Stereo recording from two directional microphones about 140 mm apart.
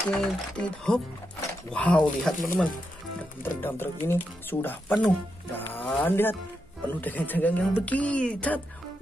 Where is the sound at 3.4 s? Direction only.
15° left (ahead or behind).